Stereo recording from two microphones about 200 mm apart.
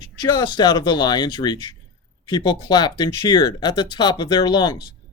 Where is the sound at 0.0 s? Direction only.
20° left (ahead or behind).